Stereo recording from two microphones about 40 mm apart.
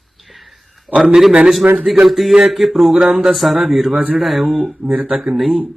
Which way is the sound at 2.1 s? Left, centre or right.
Centre.